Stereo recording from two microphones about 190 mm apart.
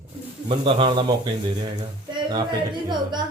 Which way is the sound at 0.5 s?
25° right (ahead or behind).